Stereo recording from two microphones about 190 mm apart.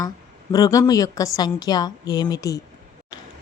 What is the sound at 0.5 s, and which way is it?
A woman's voice, 20° left (ahead or behind).